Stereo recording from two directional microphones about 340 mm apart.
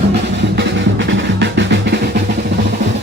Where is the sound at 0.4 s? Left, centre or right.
Right.